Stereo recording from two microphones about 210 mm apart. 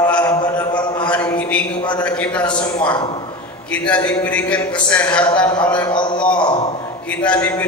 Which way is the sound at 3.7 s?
5° left (ahead or behind).